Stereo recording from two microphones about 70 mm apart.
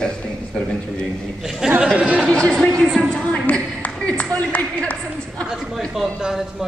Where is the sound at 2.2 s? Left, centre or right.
Centre.